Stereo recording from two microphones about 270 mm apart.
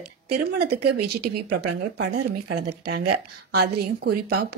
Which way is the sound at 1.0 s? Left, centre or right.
Right.